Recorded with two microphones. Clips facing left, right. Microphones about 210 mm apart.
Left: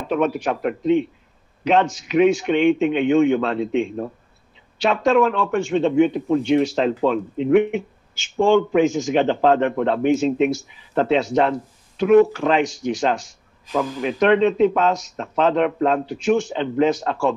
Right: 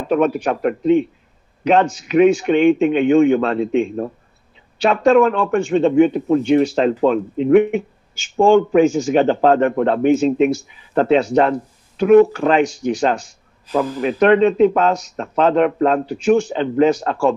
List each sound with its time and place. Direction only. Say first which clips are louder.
0.2 s speech: right 4 dB; 45° right (ahead or behind)
5.1 s speech: right 4 dB; 45° right (ahead or behind)
13.7 s speech: right 4 dB; 45° right (ahead or behind)